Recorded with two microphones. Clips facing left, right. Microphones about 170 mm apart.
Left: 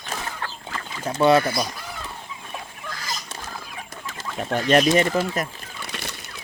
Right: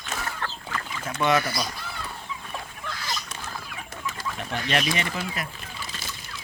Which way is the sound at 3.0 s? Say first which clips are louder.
Left 1 dB; 35° left (ahead or behind).